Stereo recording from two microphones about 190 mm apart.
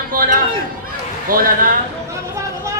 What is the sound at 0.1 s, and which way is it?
A man's voice, 50° right (ahead or behind).